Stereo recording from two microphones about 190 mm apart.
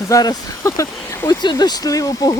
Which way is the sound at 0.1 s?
20° left (ahead or behind).